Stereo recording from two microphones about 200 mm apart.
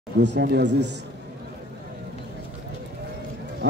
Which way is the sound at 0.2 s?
60° right (ahead or behind).